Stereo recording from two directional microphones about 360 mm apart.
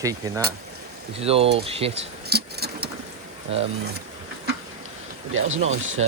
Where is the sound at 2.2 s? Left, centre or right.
Right.